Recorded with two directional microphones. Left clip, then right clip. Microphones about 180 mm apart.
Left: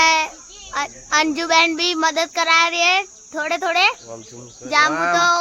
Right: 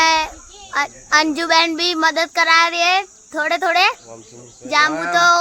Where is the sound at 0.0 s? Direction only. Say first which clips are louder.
Even; 5° right (ahead or behind).